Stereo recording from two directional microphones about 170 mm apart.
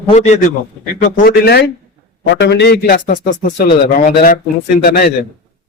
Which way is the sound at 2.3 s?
85° left.